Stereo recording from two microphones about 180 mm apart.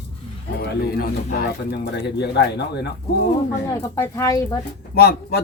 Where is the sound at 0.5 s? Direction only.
60° left (ahead or behind).